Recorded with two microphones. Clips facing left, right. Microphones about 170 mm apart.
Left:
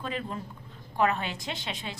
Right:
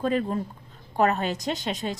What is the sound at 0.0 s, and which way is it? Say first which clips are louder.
A woman's voice: right 9 dB; 45° right (ahead or behind).